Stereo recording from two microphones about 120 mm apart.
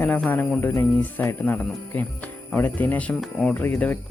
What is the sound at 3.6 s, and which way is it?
Speech, 15° left (ahead or behind).